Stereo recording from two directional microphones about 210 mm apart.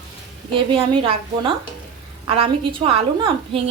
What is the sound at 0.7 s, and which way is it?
Stir, 25° right (ahead or behind).